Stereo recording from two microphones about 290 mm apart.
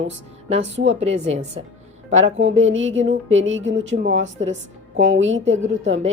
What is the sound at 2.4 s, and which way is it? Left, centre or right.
Speech, right.